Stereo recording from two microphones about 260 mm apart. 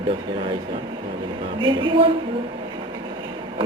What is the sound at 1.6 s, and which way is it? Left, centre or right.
Speech, centre.